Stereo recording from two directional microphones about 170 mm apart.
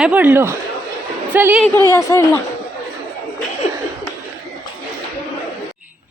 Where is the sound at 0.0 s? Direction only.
10° right (ahead or behind).